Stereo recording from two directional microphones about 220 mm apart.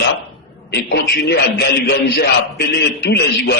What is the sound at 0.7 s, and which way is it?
A man's voice, 50° left (ahead or behind).